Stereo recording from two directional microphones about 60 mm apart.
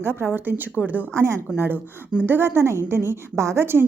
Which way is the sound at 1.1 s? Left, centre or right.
Right.